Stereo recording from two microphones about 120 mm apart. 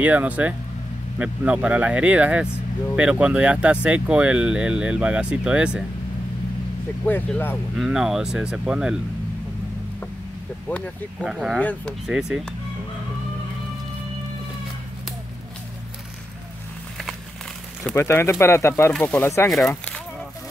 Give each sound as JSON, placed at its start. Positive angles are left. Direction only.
{"t": 0.0, "sound": "speech", "side_deg": -15}
{"t": 7.1, "sound": "speech", "side_deg": 15}
{"t": 7.7, "sound": "speech", "side_deg": -5}
{"t": 11.2, "sound": "speech", "side_deg": -5}
{"t": 17.9, "sound": "speech", "side_deg": 20}
{"t": 18.9, "sound": "speech", "side_deg": 10}
{"t": 19.2, "sound": "speech", "side_deg": 20}